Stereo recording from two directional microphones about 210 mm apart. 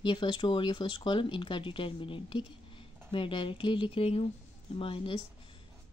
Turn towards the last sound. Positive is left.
turn(degrees=25)  # may be behind; listen again after turning